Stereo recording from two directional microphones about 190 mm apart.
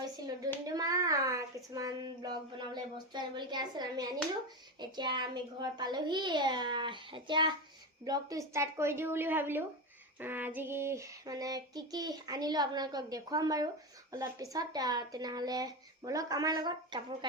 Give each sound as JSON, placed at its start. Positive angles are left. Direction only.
{"t": 0.0, "sound": "hands", "side_deg": -20}
{"t": 0.7, "sound": "a sound", "side_deg": -20}
{"t": 4.8, "sound": "child singing", "side_deg": -25}
{"t": 8.0, "sound": "a woman's voice", "side_deg": -20}
{"t": 10.2, "sound": "child singing", "side_deg": -10}